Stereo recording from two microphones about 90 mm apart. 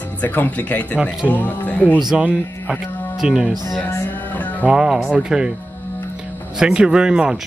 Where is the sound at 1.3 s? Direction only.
20° left (ahead or behind).